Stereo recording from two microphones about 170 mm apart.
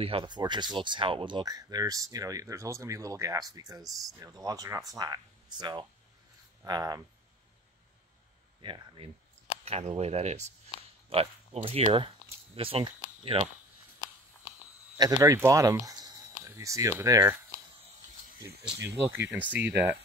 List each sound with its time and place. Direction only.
0.0 s speech: 30° right (ahead or behind)
3.8 s speech: centre (ahead or behind)
4.2 s speech: 20° right (ahead or behind)
8.5 s speech: 30° right (ahead or behind)
15.0 s speech: 20° right (ahead or behind)
18.6 s speech: 5° right (ahead or behind)